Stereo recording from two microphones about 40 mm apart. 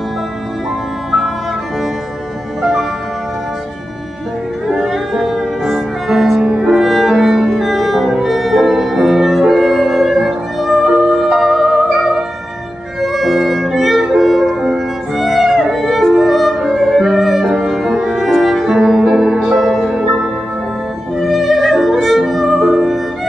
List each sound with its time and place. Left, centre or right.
2.6 s music: centre
4.7 s music: centre
6.3 s music: right
6.8 s music: centre
17.4 s music: centre
17.7 s music: centre
18.7 s music: centre
19.5 s music: centre
21.2 s music: centre